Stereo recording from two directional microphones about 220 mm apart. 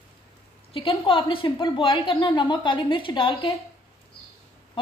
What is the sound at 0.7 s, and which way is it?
A woman's voice, 25° left (ahead or behind).